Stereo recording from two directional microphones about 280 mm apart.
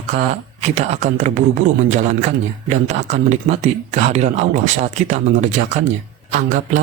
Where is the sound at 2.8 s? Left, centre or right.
Right.